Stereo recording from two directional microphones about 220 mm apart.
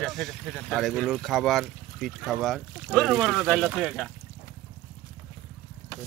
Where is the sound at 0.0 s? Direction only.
Centre (ahead or behind).